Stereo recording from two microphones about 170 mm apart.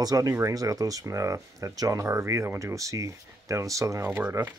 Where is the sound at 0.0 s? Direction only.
20° right (ahead or behind).